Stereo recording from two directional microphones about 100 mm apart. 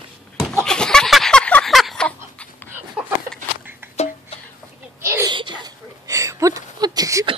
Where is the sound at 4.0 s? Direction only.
75° left (ahead or behind).